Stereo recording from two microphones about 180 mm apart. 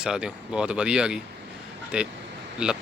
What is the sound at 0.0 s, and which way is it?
A man's voice, 5° right (ahead or behind).